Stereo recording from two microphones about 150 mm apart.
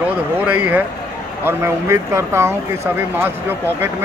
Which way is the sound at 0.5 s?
10° right (ahead or behind).